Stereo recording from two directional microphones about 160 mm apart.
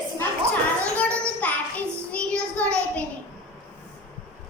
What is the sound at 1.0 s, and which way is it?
Child singing, 10° left (ahead or behind).